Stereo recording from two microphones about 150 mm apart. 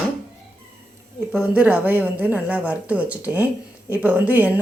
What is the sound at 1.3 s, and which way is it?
A woman's voice, 10° right (ahead or behind).